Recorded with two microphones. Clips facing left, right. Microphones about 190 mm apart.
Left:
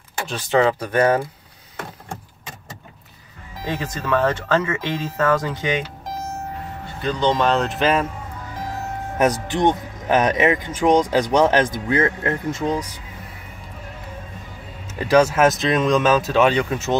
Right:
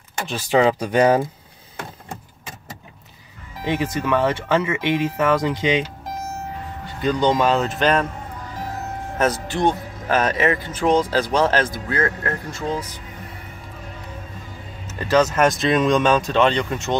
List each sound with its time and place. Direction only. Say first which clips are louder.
0.5 s speech: right 1 dB; 15° right (ahead or behind)
3.6 s speech: right 4 dB; 15° right (ahead or behind)
7.0 s speech: right 1 dB; 10° right (ahead or behind); by 8.1 s 5° left (ahead or behind)
9.2 s speech: left 2 dB; 15° left (ahead or behind)
14.9 s speech: left 2 dB; 15° left (ahead or behind)